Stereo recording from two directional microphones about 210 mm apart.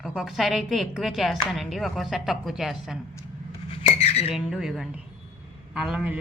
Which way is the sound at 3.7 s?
30° left (ahead or behind).